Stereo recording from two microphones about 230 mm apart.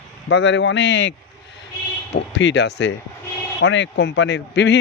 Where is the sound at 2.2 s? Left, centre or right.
Left.